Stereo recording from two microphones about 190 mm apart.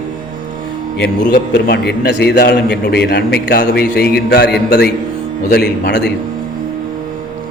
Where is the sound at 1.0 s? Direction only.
55° left (ahead or behind).